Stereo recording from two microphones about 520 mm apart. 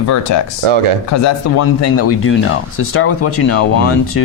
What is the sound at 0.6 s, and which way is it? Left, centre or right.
Speech, right.